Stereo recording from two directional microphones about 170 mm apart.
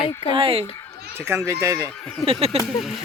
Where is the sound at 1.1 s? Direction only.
15° right (ahead or behind).